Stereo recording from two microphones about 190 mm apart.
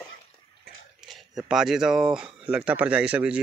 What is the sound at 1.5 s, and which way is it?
Speech, 5° right (ahead or behind).